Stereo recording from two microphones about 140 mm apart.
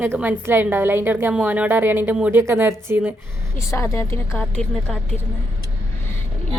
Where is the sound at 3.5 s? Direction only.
20° left (ahead or behind).